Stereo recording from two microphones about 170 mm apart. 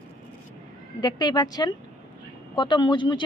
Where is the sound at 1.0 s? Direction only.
25° left (ahead or behind).